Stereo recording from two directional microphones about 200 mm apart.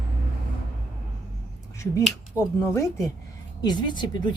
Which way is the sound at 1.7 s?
15° left (ahead or behind).